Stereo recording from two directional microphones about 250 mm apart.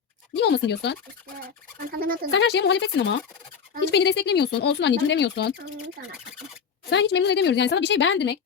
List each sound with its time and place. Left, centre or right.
0.3 s speech: left
1.9 s speech: right
2.3 s speech: left
6.9 s speech: left